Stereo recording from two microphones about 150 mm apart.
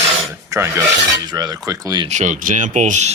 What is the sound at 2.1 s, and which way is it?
Speech, 55° right (ahead or behind).